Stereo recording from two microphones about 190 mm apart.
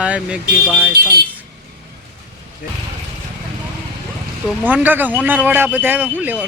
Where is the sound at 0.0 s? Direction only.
5° right (ahead or behind).